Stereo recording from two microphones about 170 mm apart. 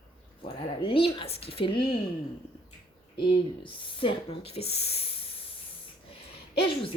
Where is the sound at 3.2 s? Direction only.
30° left (ahead or behind).